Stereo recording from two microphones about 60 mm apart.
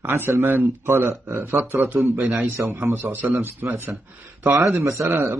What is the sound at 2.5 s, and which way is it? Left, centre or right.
A man's voice, right.